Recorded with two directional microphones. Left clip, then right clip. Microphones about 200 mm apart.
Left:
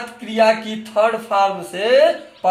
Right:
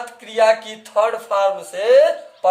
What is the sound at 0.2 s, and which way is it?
Speech, 40° right (ahead or behind).